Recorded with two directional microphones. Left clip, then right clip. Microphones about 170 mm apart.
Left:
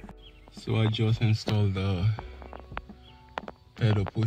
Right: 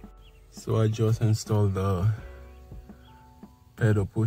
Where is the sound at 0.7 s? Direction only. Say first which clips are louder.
Right 3 dB; 10° right (ahead or behind).